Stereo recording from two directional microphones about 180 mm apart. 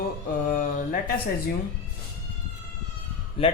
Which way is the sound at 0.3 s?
50° left (ahead or behind).